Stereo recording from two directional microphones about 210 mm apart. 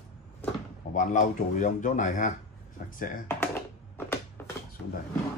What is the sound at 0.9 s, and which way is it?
A man's voice, 35° left (ahead or behind).